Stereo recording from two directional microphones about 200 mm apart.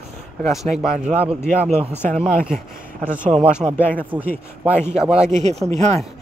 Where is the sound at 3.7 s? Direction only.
10° left (ahead or behind).